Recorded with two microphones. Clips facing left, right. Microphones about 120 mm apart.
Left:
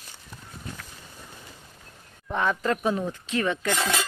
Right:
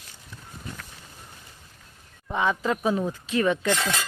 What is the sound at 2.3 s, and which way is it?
Speech, 5° right (ahead or behind).